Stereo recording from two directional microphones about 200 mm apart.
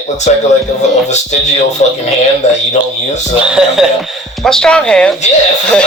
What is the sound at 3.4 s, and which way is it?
Speech, 5° right (ahead or behind).